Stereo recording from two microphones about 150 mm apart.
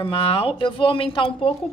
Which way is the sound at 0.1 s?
40° left (ahead or behind).